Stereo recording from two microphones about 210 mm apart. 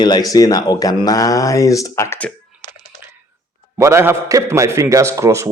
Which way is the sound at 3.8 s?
10° right (ahead or behind).